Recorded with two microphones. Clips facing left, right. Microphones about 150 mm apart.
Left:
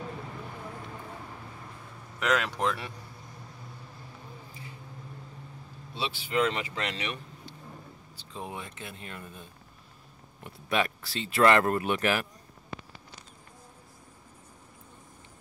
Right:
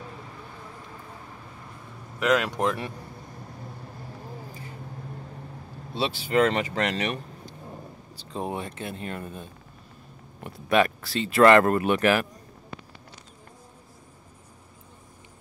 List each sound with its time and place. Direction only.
2.1 s speech: 10° right (ahead or behind)
5.9 s speech: 40° right (ahead or behind)
9.0 s speech: 50° right (ahead or behind)
10.4 s speech: 65° right (ahead or behind)